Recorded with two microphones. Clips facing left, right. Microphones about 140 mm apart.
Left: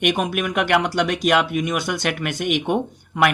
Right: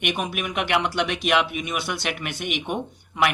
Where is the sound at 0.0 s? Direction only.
50° left (ahead or behind).